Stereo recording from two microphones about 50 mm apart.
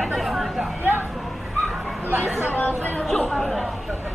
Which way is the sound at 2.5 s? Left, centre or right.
Left.